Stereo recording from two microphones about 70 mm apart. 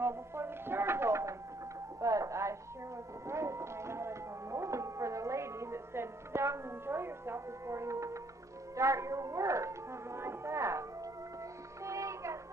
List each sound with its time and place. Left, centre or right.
0.0 s chopping: right
2.0 s radio: right
3.3 s music: right
8.7 s speech: right
11.8 s music: right